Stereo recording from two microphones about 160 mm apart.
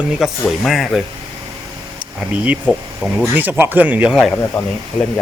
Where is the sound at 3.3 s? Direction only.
15° right (ahead or behind).